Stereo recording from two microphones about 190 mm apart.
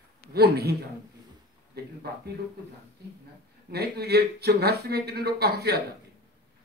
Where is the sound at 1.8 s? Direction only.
55° right (ahead or behind).